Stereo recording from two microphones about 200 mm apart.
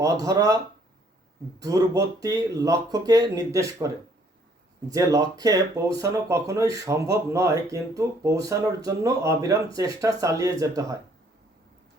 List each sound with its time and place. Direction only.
0.0 s speech: 15° right (ahead or behind)